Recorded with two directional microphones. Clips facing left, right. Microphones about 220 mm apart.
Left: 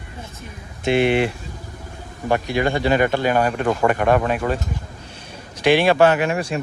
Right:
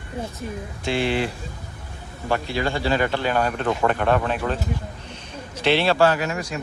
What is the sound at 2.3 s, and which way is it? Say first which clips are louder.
A man's voice: left 4 dB; 15° left (ahead or behind).